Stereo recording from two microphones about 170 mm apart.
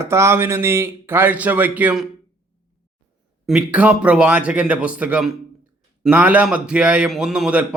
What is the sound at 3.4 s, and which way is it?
A man's voice, 5° right (ahead or behind).